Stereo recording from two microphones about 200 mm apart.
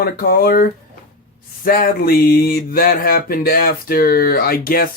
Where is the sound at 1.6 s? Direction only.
45° left (ahead or behind).